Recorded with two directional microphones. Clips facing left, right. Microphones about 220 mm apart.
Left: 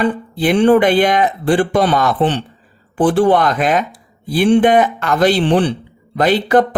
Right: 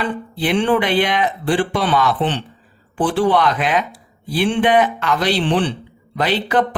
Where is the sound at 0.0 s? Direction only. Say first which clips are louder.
Left 6 dB; 45° left (ahead or behind).